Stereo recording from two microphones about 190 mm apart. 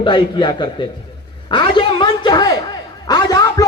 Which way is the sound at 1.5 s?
25° left (ahead or behind).